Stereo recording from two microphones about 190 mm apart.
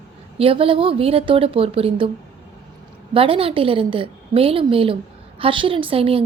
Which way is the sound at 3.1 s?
30° right (ahead or behind).